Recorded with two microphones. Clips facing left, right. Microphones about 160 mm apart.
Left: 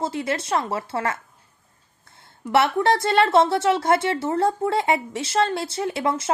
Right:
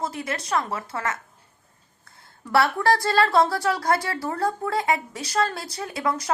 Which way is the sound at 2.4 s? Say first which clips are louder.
Left 2 dB; 20° left (ahead or behind).